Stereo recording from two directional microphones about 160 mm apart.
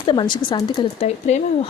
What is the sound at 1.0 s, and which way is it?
Speech, 40° left (ahead or behind).